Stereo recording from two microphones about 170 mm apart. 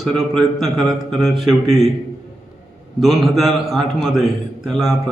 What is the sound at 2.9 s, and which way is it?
A man's voice, centre (ahead or behind).